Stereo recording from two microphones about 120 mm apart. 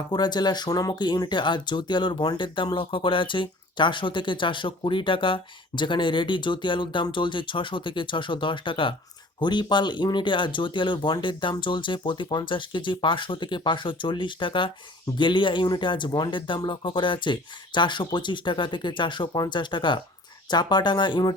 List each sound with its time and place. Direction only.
0.1 s speech: 35° left (ahead or behind)